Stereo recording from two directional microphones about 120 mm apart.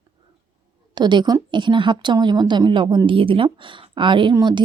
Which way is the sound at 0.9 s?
40° right (ahead or behind).